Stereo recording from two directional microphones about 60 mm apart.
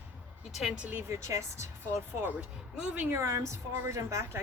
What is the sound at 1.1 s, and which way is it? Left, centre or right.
Speech, right.